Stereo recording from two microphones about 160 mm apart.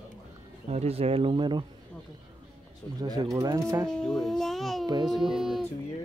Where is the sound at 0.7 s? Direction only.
40° right (ahead or behind).